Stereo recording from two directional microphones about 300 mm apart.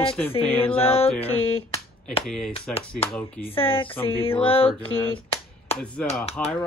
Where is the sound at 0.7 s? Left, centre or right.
Centre.